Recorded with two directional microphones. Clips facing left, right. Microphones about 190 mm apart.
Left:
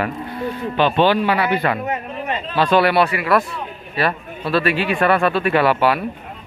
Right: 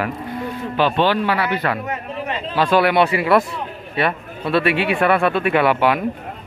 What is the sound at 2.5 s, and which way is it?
Speech, 10° right (ahead or behind).